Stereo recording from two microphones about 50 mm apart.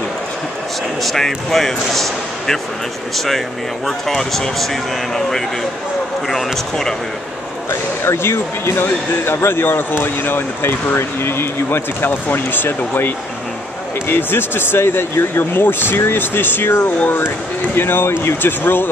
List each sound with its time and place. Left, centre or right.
1.0 s speech: centre
6.2 s speech: centre
8.0 s speech: left